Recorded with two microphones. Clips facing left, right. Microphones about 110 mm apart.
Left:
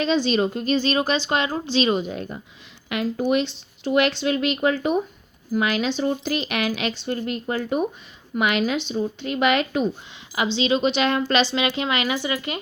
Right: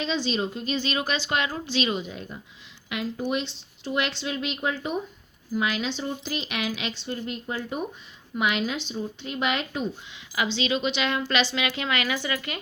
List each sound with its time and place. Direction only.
0.0 s a woman's voice: 60° left (ahead or behind); by 1.9 s 30° left (ahead or behind)
1.9 s speech: 50° left (ahead or behind); by 9.9 s 70° left (ahead or behind)
10.3 s speech: 25° left (ahead or behind)